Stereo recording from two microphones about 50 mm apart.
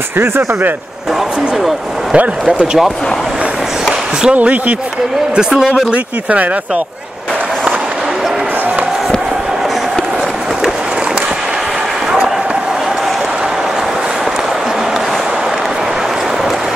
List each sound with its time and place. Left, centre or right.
0.2 s speech: right
2.1 s speech: right
4.4 s speech: right
5.3 s a man's voice: centre